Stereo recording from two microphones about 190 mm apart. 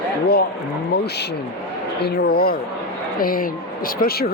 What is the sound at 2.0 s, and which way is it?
Speech, 60° left (ahead or behind).